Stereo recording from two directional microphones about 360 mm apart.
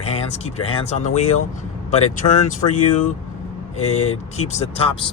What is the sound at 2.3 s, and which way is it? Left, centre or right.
Speech, centre.